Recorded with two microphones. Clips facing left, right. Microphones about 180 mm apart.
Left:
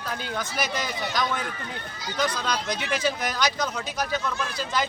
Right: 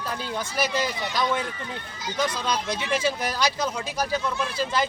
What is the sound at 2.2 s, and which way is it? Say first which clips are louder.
Speech: even; 25° right (ahead or behind).